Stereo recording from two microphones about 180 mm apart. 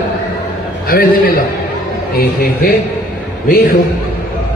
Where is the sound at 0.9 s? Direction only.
55° left (ahead or behind).